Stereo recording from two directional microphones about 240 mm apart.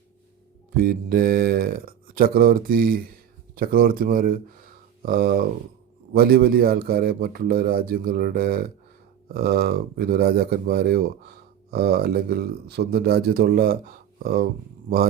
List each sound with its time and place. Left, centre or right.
0.8 s a man's voice: right